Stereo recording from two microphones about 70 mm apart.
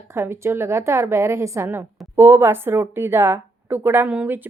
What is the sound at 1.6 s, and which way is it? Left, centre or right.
A woman's voice, right.